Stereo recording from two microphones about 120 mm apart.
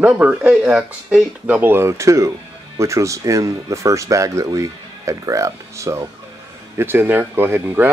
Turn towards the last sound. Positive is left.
turn(degrees=-20)  # may be behind; listen again after turning